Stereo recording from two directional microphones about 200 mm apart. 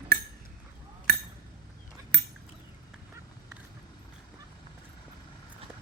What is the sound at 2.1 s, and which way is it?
Cutlery, 60° right (ahead or behind).